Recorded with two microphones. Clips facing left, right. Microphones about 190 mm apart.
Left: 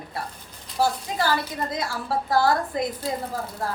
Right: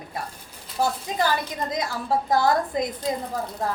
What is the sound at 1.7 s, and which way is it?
A woman's voice, 20° right (ahead or behind).